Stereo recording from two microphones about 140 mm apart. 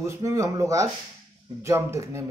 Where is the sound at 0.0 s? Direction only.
20° right (ahead or behind).